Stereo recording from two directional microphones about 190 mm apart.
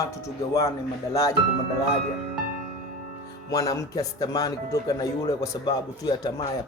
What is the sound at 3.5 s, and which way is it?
Speech, 20° left (ahead or behind).